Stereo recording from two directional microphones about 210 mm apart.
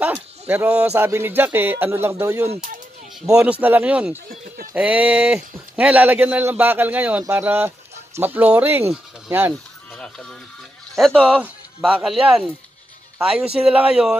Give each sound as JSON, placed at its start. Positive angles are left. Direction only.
{"t": 0.0, "sound": "speech", "side_deg": -10}
{"t": 2.4, "sound": "speech", "side_deg": -30}
{"t": 3.3, "sound": "speech", "side_deg": -5}
{"t": 9.9, "sound": "speech", "side_deg": 5}